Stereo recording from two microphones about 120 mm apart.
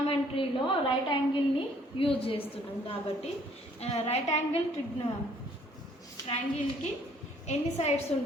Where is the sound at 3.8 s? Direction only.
65° left (ahead or behind).